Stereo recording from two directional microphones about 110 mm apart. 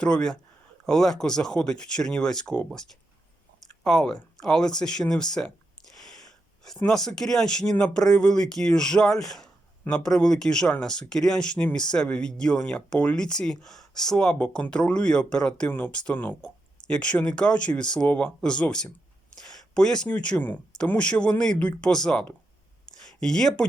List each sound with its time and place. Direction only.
0.0 s speech: 10° left (ahead or behind)
5.9 s a sound: 5° left (ahead or behind)
6.7 s speech: 5° left (ahead or behind)